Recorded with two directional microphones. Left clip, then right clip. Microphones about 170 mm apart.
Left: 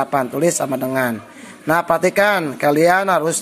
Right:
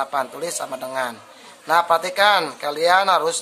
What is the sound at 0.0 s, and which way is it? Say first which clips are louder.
A man's voice: left 6 dB; 25° left (ahead or behind).